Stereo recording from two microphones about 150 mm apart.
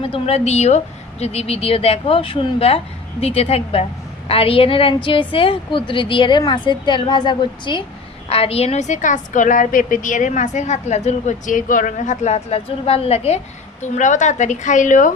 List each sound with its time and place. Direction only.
0.0 s a woman's voice: 40° left (ahead or behind); by 15.1 s 60° left (ahead or behind)